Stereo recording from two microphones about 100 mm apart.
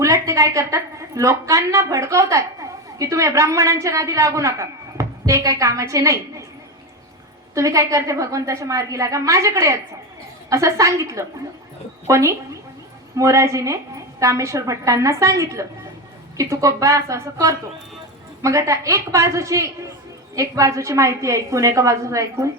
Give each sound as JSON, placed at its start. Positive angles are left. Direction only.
{"t": 0.0, "sound": "a woman's voice", "side_deg": -30}
{"t": 7.5, "sound": "a woman's voice", "side_deg": -35}